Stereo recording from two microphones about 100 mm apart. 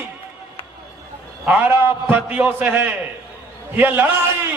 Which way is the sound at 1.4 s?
15° right (ahead or behind).